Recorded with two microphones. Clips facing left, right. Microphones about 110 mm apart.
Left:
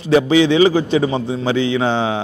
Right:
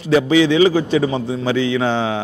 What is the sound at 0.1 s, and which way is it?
A man's voice, 25° left (ahead or behind).